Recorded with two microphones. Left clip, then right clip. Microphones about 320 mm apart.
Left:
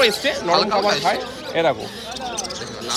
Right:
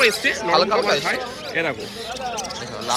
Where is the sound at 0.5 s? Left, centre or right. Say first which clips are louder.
Even; centre.